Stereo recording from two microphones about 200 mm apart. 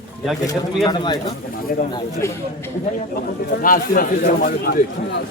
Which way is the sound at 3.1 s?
45° left (ahead or behind).